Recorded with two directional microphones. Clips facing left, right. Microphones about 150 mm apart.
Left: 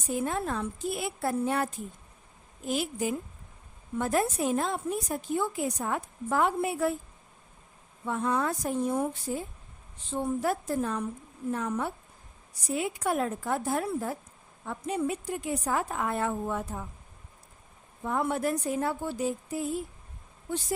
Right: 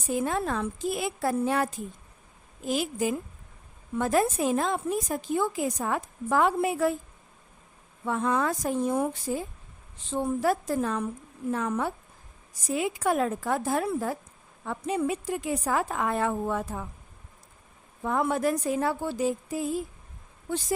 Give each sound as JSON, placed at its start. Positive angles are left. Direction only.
{"t": 0.2, "sound": "a woman's voice", "side_deg": -90}
{"t": 8.0, "sound": "a woman's voice", "side_deg": -90}
{"t": 10.4, "sound": "a woman's voice", "side_deg": -90}
{"t": 18.0, "sound": "a woman's voice", "side_deg": -90}